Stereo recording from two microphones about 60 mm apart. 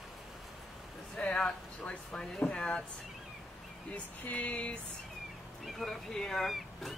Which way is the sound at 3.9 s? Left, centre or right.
Left.